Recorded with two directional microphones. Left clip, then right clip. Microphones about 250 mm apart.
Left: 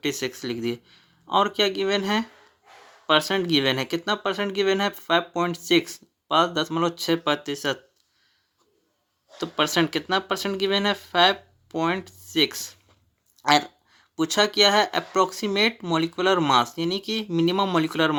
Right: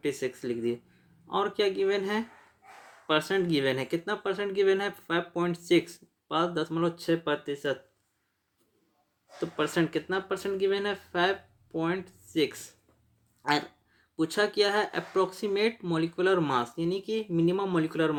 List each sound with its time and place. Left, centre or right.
0.0 s speech: left
9.4 s speech: left